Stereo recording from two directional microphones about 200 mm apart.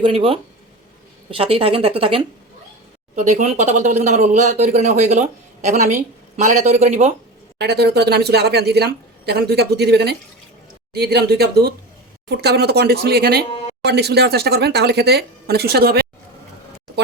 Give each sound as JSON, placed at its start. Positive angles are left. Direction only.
{"t": 0.0, "sound": "a woman's voice", "side_deg": -25}
{"t": 7.6, "sound": "a woman's voice", "side_deg": -55}